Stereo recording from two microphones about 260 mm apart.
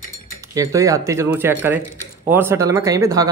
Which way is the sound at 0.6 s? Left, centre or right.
Centre.